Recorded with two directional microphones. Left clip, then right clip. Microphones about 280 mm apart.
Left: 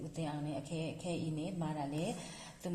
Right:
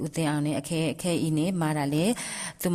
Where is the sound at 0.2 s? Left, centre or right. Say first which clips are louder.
Right 13 dB; right.